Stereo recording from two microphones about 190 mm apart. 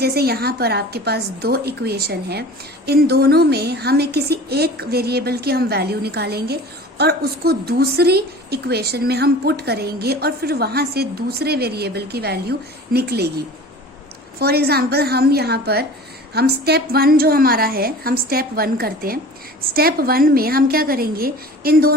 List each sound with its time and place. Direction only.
0.0 s a woman's voice: 55° right (ahead or behind)
14.3 s a woman's voice: 55° right (ahead or behind)